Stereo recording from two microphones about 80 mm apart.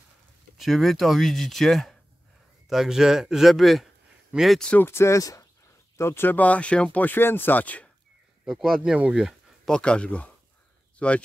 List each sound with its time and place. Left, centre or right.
0.6 s speech: centre
4.7 s speech: left
5.9 s speech: left
8.5 s speech: centre
9.7 s speech: centre